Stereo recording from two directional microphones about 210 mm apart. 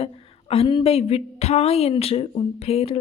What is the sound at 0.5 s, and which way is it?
Speech, 25° left (ahead or behind).